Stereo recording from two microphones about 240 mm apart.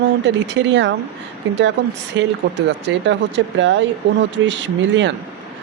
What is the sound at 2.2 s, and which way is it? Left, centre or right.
Speech, right.